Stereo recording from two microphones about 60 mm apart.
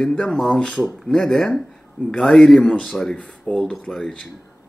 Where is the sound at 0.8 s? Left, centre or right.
Centre.